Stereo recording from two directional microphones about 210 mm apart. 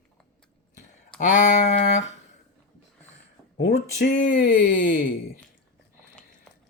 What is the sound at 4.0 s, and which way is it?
Speech, 50° left (ahead or behind).